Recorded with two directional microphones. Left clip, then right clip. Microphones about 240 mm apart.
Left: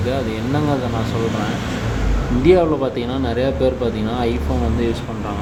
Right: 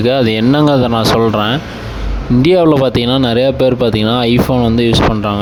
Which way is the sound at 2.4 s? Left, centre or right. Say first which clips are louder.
Right 5 dB; right.